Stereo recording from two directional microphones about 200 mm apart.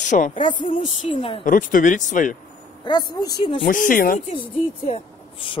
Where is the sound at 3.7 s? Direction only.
45° left (ahead or behind).